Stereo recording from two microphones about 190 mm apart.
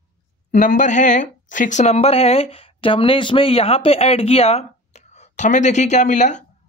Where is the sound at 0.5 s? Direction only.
40° left (ahead or behind).